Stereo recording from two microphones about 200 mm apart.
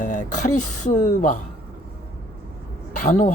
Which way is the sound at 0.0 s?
40° left (ahead or behind).